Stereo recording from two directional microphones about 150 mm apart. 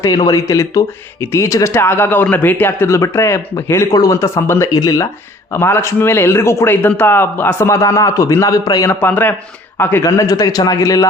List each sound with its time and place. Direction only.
0.0 s speech: 25° left (ahead or behind)
8.9 s speech: 15° left (ahead or behind)